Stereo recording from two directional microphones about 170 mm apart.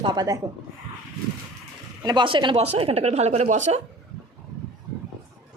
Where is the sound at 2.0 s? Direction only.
25° right (ahead or behind); by 3.8 s 45° right (ahead or behind).